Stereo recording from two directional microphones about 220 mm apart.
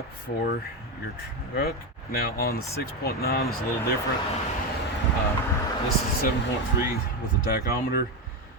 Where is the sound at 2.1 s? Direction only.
45° left (ahead or behind).